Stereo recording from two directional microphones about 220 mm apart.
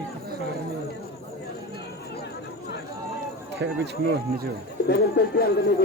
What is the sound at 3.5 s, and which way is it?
Speech, 50° right (ahead or behind).